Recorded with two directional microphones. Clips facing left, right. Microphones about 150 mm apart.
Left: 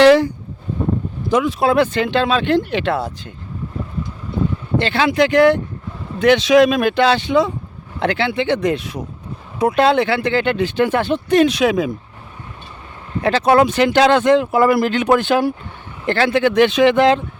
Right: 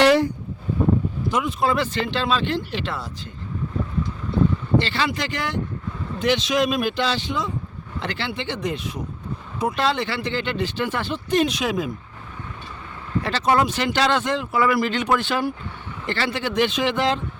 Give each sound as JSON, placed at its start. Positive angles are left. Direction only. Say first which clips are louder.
{"t": 0.0, "sound": "a sound", "louder": "left 6 dB", "side_deg": 90}
{"t": 1.3, "sound": "speech", "louder": "left 7 dB", "side_deg": 90}
{"t": 4.8, "sound": "speech", "louder": "left 8 dB", "side_deg": 55}
{"t": 13.2, "sound": "speech", "louder": "left 7 dB", "side_deg": 60}